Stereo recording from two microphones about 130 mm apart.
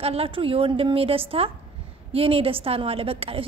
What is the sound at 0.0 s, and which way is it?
A woman's voice, 50° right (ahead or behind).